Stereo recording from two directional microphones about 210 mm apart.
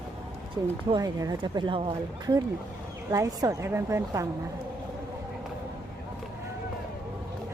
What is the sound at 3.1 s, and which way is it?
A woman's voice, 15° right (ahead or behind).